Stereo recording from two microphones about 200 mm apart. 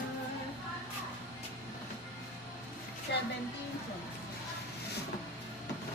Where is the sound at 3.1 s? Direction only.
60° left (ahead or behind).